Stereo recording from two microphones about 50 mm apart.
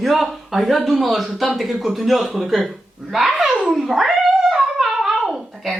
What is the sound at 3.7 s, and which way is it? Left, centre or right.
Cat, centre.